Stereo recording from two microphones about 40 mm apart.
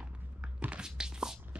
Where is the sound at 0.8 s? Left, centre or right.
Centre.